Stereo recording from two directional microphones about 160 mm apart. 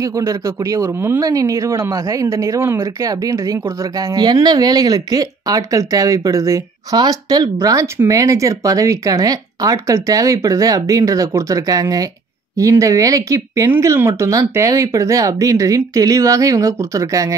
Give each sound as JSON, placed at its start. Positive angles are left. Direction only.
{"t": 0.0, "sound": "speech", "side_deg": -20}